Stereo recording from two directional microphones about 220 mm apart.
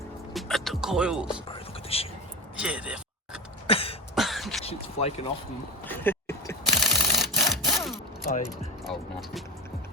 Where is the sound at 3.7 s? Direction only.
25° left (ahead or behind).